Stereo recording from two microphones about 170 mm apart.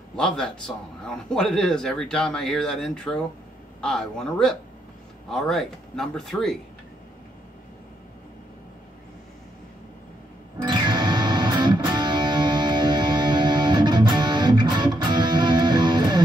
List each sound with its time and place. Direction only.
0.4 s speech: 5° left (ahead or behind)
10.7 s music: 25° right (ahead or behind)